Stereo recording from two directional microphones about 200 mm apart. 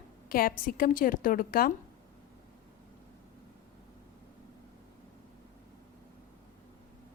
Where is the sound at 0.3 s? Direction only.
45° left (ahead or behind).